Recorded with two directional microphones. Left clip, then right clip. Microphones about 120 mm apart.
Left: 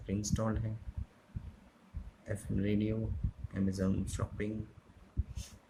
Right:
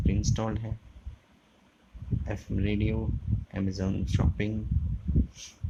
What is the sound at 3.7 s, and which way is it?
Speech, 60° right (ahead or behind).